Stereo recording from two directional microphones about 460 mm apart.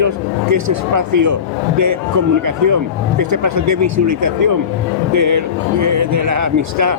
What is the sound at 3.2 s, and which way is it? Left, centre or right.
A man's voice, right.